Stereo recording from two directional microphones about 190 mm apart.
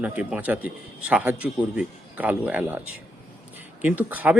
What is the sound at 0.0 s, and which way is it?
A man's voice, 5° right (ahead or behind).